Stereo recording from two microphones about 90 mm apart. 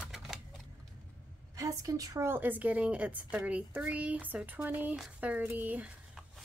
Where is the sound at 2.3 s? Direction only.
20° right (ahead or behind).